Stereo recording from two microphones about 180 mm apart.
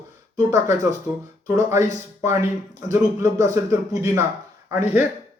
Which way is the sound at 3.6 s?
15° right (ahead or behind).